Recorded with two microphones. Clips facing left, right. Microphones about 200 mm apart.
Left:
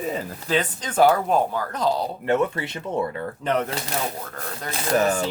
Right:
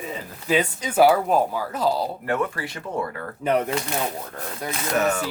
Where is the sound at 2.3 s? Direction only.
25° left (ahead or behind).